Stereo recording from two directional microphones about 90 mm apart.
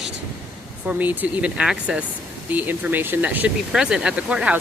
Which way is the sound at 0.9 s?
20° right (ahead or behind).